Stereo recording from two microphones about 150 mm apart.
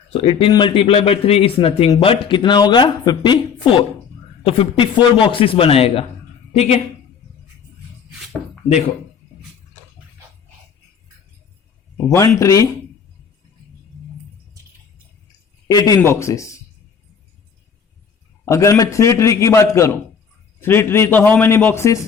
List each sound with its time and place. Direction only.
0.1 s a woman's voice: 35° left (ahead or behind)
12.0 s a man's voice: 20° left (ahead or behind)
15.6 s a man's voice: 25° left (ahead or behind)
18.4 s a man's voice: 20° left (ahead or behind)